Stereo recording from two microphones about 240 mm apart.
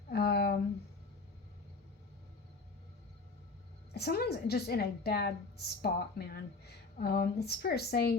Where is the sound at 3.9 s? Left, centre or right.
Left.